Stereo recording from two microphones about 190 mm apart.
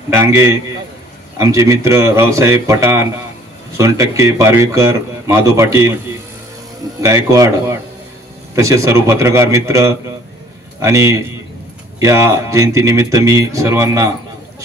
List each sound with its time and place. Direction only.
0.2 s speech: 15° right (ahead or behind)
7.0 s speech: 15° right (ahead or behind)